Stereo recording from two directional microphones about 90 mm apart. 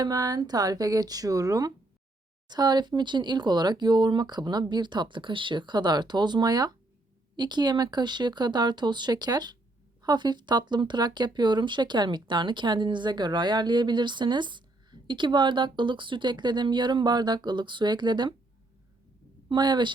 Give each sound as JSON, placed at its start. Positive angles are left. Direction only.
{"t": 0.0, "sound": "speech", "side_deg": -45}
{"t": 2.5, "sound": "speech", "side_deg": -50}
{"t": 19.5, "sound": "speech", "side_deg": -55}